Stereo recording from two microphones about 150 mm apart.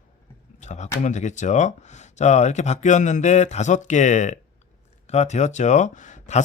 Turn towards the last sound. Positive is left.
turn(degrees=55)  # may be behind; listen again after turning